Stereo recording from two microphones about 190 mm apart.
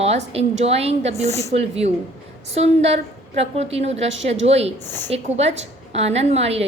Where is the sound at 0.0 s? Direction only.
35° right (ahead or behind).